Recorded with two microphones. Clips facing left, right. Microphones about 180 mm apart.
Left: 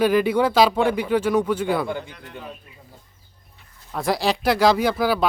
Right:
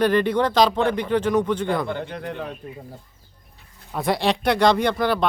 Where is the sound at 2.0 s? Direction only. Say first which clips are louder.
Right 8 dB; 60° right (ahead or behind).